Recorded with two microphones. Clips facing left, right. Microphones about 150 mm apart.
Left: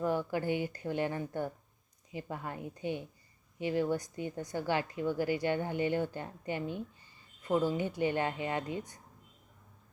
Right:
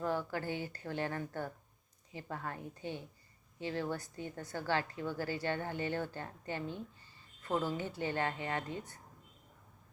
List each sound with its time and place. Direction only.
0.0 s speech: 15° left (ahead or behind)